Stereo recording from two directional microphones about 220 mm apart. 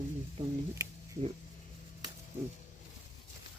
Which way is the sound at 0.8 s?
15° right (ahead or behind).